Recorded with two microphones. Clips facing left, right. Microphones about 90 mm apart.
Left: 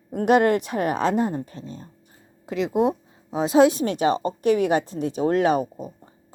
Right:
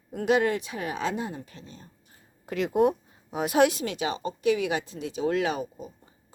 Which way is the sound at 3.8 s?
45° left (ahead or behind).